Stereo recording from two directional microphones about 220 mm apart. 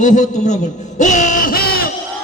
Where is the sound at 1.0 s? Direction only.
35° left (ahead or behind).